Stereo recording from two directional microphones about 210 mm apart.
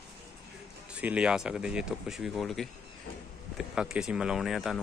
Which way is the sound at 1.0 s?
5° right (ahead or behind).